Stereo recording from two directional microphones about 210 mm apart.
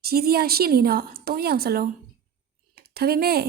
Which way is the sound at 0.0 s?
45° right (ahead or behind).